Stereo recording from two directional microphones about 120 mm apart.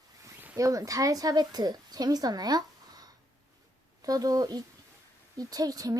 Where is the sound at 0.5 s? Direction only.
30° right (ahead or behind).